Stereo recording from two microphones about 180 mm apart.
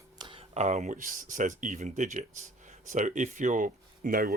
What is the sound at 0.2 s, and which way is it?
Speech, 30° right (ahead or behind).